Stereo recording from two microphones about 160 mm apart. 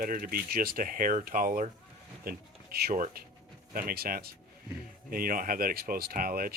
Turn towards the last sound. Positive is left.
turn(degrees=-65)  # may be behind; listen again after turning